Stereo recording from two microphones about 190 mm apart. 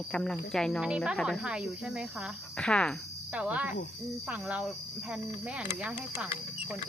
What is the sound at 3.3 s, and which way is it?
Speech, 5° right (ahead or behind).